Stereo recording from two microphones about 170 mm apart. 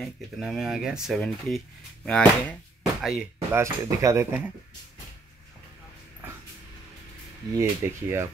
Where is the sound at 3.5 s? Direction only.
15° right (ahead or behind).